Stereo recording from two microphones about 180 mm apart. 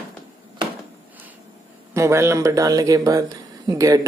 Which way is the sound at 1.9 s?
15° right (ahead or behind).